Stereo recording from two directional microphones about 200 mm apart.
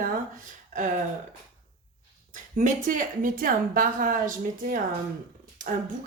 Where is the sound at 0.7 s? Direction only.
40° right (ahead or behind).